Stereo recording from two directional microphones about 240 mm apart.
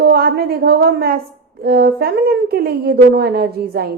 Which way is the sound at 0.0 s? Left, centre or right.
Right.